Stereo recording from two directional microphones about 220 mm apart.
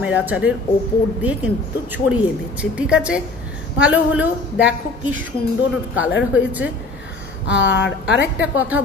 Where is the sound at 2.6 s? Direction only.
5° right (ahead or behind).